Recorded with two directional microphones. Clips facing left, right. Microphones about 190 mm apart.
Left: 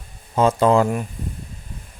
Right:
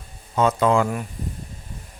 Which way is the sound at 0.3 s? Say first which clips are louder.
Left 3 dB; 30° left (ahead or behind).